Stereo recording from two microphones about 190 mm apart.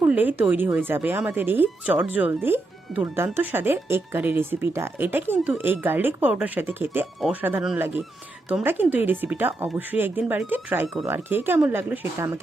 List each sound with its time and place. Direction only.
0.0 s speech: 10° right (ahead or behind)